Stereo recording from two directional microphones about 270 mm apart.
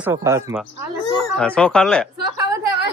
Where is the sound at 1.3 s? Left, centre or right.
Centre.